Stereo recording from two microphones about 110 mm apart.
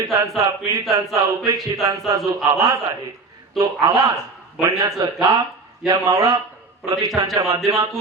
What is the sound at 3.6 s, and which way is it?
Speech, 30° right (ahead or behind).